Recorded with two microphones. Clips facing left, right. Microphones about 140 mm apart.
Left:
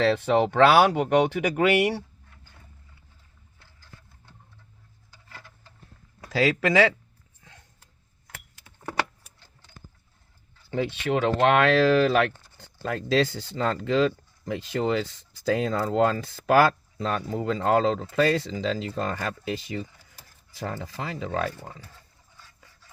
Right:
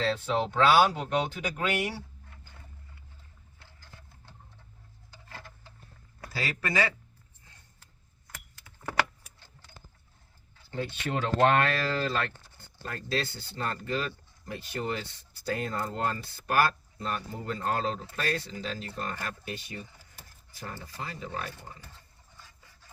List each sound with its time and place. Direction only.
0.0 s speech: 70° left (ahead or behind)
6.3 s speech: 90° left
7.4 s a sound: 90° left
10.7 s speech: 80° left
12.5 s speech: 90° left